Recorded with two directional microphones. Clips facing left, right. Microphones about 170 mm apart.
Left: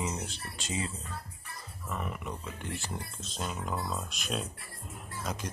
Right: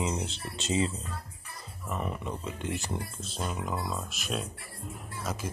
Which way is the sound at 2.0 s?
30° right (ahead or behind).